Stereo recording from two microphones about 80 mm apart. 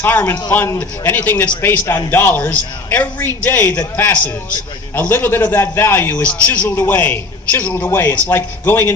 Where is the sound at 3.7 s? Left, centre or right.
Centre.